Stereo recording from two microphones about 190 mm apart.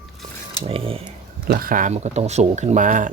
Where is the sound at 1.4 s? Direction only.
50° right (ahead or behind).